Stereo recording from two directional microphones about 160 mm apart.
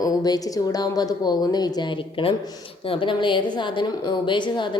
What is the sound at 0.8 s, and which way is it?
Speech, 25° left (ahead or behind).